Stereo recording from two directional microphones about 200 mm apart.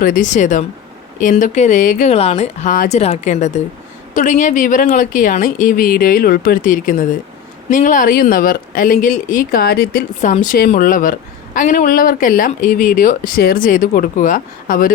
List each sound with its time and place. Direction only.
0.0 s speech: 40° left (ahead or behind)
10.2 s speech: 40° left (ahead or behind)